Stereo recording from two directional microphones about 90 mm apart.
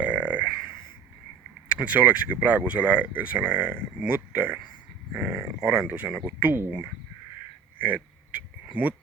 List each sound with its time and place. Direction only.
0.0 s burping: 15° right (ahead or behind)
1.7 s speech: 15° right (ahead or behind)
7.8 s a sound: 15° right (ahead or behind)